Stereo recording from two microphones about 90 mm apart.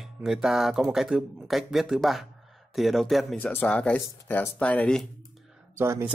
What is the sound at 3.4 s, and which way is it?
Speech, 20° left (ahead or behind).